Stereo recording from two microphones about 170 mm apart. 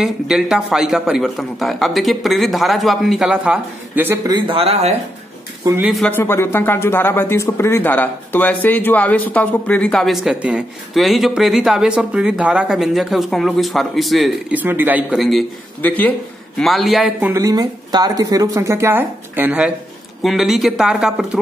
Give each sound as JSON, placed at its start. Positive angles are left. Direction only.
{"t": 0.0, "sound": "a man's voice", "side_deg": 0}
{"t": 4.3, "sound": "speech", "side_deg": -30}
{"t": 5.8, "sound": "a man's voice", "side_deg": -5}
{"t": 6.0, "sound": "a man's voice", "side_deg": 10}
{"t": 14.6, "sound": "a man's voice", "side_deg": -10}
{"t": 17.2, "sound": "a woman's voice", "side_deg": -15}